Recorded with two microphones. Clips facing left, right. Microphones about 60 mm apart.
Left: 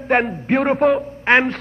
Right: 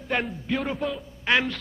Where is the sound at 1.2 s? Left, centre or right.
Left.